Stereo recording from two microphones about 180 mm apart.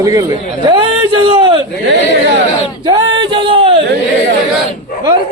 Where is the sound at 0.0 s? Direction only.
20° right (ahead or behind).